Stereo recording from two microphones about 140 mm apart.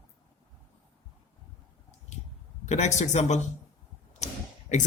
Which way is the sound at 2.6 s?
55° left (ahead or behind).